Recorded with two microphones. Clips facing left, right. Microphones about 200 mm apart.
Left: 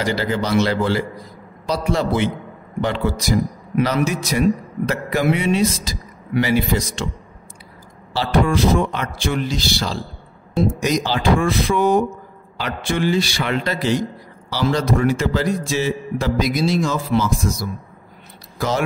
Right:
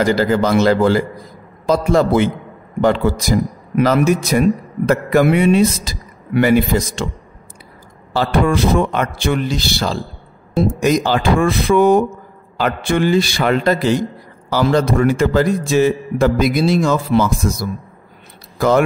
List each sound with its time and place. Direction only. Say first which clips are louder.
0.0 s a man's voice: right 7 dB; 45° right (ahead or behind)
8.1 s a man's voice: right 3 dB; 50° right (ahead or behind)